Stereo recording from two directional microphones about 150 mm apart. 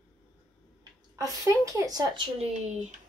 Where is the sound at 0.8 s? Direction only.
25° right (ahead or behind).